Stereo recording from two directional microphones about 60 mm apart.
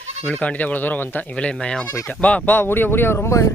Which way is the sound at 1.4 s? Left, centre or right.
Centre.